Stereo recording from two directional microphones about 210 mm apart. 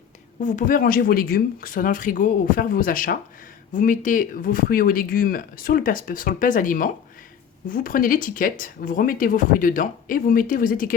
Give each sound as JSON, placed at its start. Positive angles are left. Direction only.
{"t": 0.4, "sound": "speech", "side_deg": 40}